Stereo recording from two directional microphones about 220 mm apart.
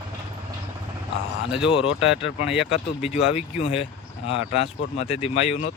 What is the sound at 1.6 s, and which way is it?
Speech, 25° left (ahead or behind).